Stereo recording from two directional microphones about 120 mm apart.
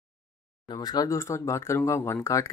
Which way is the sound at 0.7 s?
35° left (ahead or behind).